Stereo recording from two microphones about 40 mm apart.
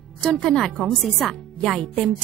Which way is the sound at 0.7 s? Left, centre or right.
Centre.